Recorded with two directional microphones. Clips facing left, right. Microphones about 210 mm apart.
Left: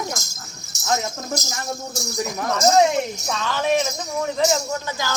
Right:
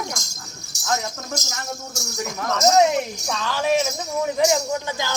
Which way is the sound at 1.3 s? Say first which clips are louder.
Left 3 dB; 35° left (ahead or behind).